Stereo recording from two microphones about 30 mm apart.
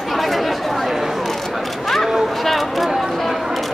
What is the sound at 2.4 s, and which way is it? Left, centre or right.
Speech, centre.